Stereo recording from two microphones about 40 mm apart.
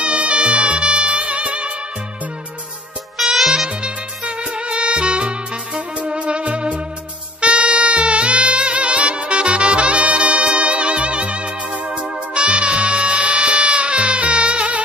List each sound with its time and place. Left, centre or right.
0.0 s music: right
3.2 s music: centre
3.6 s music: right